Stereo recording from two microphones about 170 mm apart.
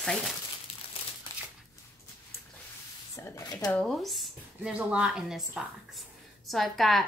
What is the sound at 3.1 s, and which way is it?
Speech, 20° left (ahead or behind).